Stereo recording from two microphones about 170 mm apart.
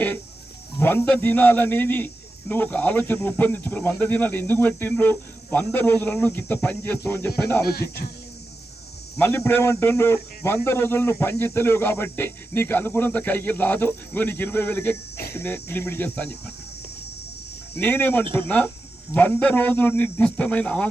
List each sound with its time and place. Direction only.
0.8 s speech: 10° left (ahead or behind)
7.6 s speech: 65° left (ahead or behind)
9.1 s speech: 15° left (ahead or behind)
17.7 s speech: 10° left (ahead or behind)